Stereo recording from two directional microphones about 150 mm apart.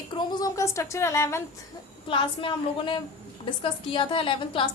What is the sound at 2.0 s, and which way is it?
A woman's voice, 35° left (ahead or behind).